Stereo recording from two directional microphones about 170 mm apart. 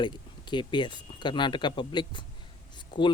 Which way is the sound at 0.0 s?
25° left (ahead or behind).